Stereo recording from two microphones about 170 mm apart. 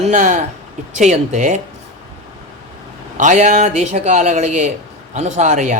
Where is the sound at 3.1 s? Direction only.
45° right (ahead or behind).